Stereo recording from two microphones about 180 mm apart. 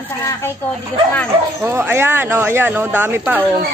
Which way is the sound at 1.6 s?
10° right (ahead or behind).